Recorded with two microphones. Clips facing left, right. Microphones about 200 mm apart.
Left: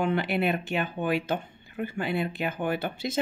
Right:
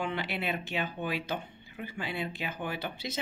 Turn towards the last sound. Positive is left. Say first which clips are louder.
# left 7 dB
turn(degrees=50)  # may be behind; listen again after turning